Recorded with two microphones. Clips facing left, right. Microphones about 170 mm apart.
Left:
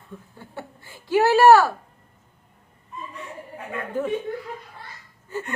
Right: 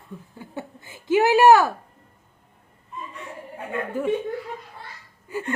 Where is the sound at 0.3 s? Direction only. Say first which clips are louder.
Right 4 dB; 20° right (ahead or behind).